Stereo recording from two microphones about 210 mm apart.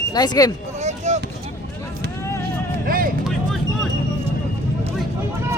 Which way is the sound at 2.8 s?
45° right (ahead or behind).